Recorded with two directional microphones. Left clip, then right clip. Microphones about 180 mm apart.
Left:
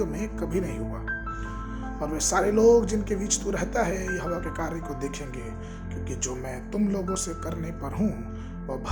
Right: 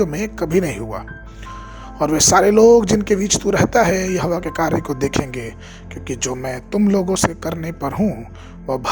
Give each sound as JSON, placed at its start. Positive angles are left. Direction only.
{"t": 0.0, "sound": "speech", "side_deg": -45}
{"t": 8.6, "sound": "music", "side_deg": -45}